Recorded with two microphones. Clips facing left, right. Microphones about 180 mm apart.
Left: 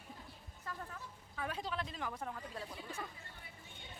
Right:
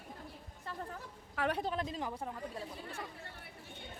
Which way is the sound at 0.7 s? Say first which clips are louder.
Right 2 dB; 30° right (ahead or behind).